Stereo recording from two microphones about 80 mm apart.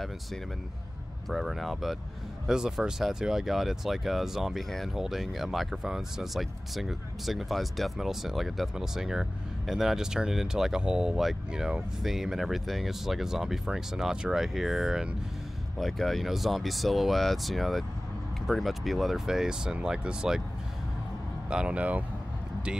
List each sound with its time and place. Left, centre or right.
1.3 s speech: centre
21.5 s speech: centre